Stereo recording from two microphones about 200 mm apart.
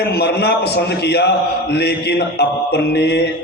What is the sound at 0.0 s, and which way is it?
A man's voice, 55° left (ahead or behind).